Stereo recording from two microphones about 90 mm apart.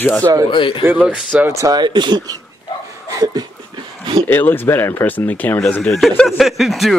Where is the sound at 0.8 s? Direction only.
15° right (ahead or behind).